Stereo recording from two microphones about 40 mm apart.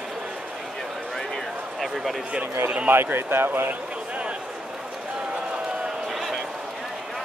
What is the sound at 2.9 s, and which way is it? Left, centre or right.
Speech, right.